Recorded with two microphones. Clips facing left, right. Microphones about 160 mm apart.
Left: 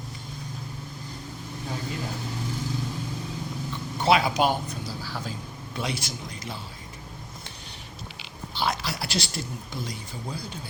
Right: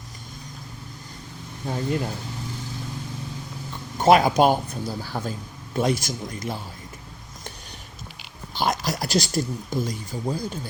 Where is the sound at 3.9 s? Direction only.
45° right (ahead or behind).